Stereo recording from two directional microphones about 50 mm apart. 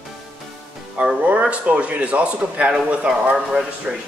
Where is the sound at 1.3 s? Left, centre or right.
Right.